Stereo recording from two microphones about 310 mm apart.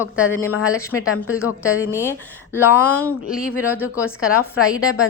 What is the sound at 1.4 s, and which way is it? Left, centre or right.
A woman's voice, centre.